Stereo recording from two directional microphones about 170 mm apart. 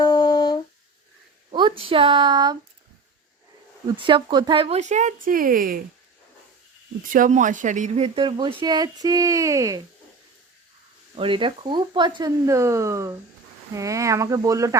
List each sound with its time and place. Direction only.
0.0 s humming: 25° left (ahead or behind)
1.5 s speech: 30° right (ahead or behind)
3.8 s speech: 30° right (ahead or behind); by 5.8 s 60° right (ahead or behind)
7.1 s speech: 50° right (ahead or behind); by 9.8 s 20° right (ahead or behind)
11.2 s speech: 30° right (ahead or behind)